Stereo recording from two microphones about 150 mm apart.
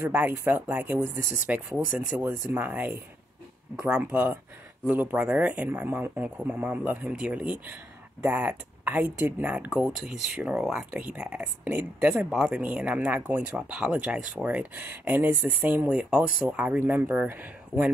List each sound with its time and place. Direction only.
0.0 s speech: 15° right (ahead or behind)